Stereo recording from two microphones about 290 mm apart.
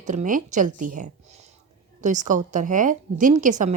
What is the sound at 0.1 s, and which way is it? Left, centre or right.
A woman's voice, right.